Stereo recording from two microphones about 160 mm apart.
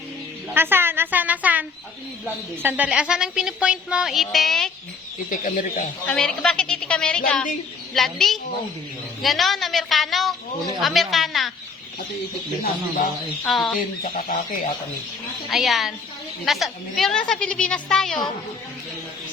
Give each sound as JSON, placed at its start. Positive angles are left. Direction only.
{"t": 0.5, "sound": "a woman's voice", "side_deg": -15}
{"t": 5.3, "sound": "speech", "side_deg": 55}
{"t": 6.1, "sound": "a woman's voice", "side_deg": 5}
{"t": 13.4, "sound": "a woman's voice", "side_deg": 0}
{"t": 13.7, "sound": "fowl", "side_deg": 65}
{"t": 15.4, "sound": "a woman's voice", "side_deg": 0}